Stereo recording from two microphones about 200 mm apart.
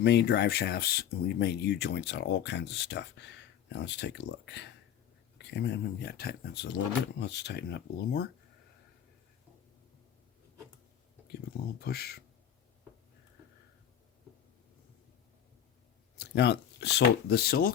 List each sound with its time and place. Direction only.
0.0 s speech: 60° left (ahead or behind)
11.8 s speech: 50° left (ahead or behind)
16.1 s speech: 55° left (ahead or behind)